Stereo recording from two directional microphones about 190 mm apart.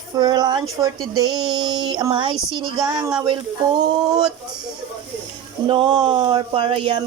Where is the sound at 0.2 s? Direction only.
20° right (ahead or behind).